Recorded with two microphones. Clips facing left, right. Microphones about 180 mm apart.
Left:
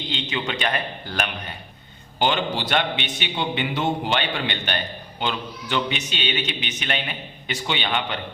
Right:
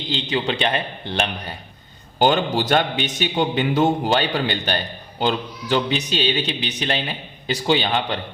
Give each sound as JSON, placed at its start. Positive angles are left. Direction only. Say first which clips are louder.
{"t": 0.1, "sound": "a man's voice", "louder": "right 6 dB", "side_deg": -35}
{"t": 2.1, "sound": "a man's voice", "louder": "right 5 dB", "side_deg": -45}